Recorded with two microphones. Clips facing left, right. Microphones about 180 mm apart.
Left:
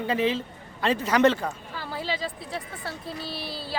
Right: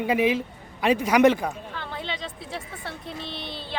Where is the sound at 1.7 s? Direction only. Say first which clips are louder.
Left 2 dB; 5° left (ahead or behind).